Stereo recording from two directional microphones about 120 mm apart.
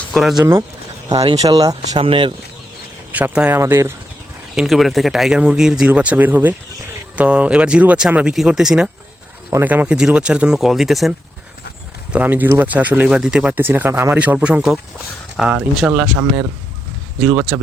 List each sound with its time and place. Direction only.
0.1 s speech: centre (ahead or behind)
1.4 s speech: 30° right (ahead or behind)
2.0 s speech: 50° right (ahead or behind)
3.1 s speech: 15° right (ahead or behind)
4.5 s speech: centre (ahead or behind)
9.5 s speech: 20° right (ahead or behind); by 11.1 s centre (ahead or behind)
12.1 s speech: 15° right (ahead or behind)
17.2 s speech: 15° right (ahead or behind)